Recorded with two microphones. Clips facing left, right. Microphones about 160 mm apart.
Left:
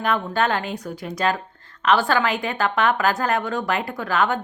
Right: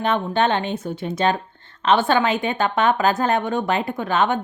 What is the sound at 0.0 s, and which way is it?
A woman's voice, 25° right (ahead or behind).